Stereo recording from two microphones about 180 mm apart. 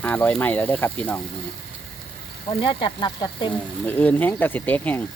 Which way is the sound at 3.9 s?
10° left (ahead or behind).